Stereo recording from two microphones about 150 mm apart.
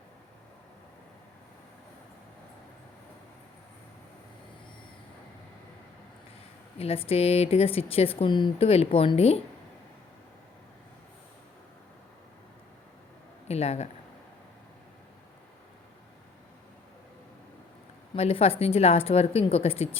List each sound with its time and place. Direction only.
6.7 s speech: 40° left (ahead or behind)
13.5 s speech: 45° left (ahead or behind)
18.1 s speech: 40° left (ahead or behind)